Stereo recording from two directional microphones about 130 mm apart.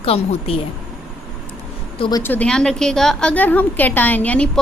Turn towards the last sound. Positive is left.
turn(degrees=10)  # may be behind; listen again after turning